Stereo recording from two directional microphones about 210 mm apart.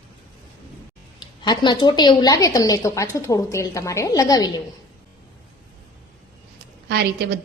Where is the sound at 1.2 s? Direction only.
20° left (ahead or behind).